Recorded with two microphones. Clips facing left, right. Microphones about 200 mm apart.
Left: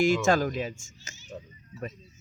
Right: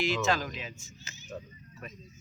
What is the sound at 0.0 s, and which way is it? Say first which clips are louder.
A man's voice: left 6 dB; 50° left (ahead or behind).